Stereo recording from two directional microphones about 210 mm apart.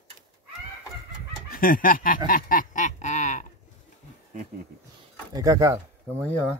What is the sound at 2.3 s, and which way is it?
Quack, 40° left (ahead or behind).